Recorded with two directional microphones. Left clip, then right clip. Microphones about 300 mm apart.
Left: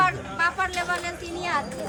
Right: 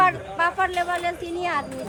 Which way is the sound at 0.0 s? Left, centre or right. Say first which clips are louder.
Right 2 dB; right.